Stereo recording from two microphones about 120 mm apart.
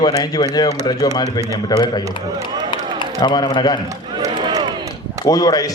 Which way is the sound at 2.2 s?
30° right (ahead or behind).